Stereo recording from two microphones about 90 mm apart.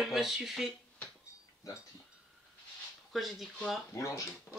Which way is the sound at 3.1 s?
Centre (ahead or behind).